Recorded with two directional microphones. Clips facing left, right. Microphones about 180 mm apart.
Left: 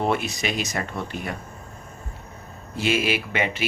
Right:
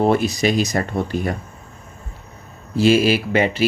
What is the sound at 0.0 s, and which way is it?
Speech, 40° right (ahead or behind).